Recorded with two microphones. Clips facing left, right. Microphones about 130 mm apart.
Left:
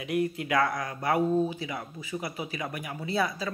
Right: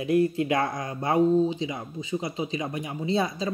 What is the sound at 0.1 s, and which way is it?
Speech, 30° right (ahead or behind).